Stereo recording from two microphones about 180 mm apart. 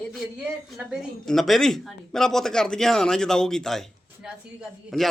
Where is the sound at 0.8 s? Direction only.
Centre (ahead or behind).